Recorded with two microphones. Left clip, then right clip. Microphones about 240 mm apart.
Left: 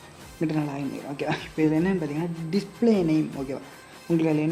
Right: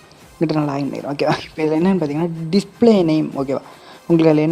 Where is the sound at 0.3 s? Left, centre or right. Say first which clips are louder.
Right 9 dB; right.